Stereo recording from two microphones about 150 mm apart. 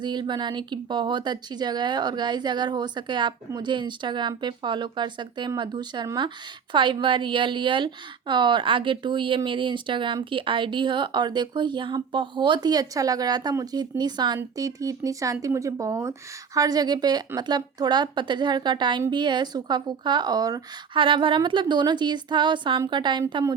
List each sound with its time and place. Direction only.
0.0 s a woman's voice: 30° right (ahead or behind)